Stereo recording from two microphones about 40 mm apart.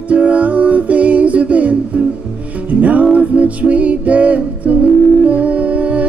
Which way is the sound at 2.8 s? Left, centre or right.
Right.